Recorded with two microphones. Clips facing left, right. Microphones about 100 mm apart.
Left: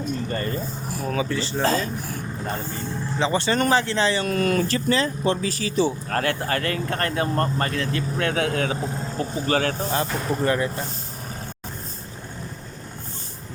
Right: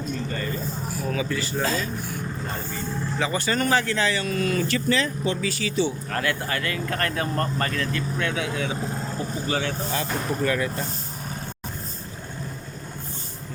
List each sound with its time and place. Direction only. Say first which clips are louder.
1.1 s speech: left 3 dB; 30° left (ahead or behind)
3.2 s speech: left 4 dB; 25° left (ahead or behind)
4.3 s speech: left 3 dB; 55° left (ahead or behind)
4.7 s speech: left 1 dB; 35° left (ahead or behind)
8.3 s speech: left 4 dB; 50° left (ahead or behind)
9.9 s speech: left 2 dB; 35° left (ahead or behind)